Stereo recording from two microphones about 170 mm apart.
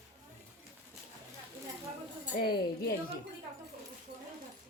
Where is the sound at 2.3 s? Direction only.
60° left (ahead or behind).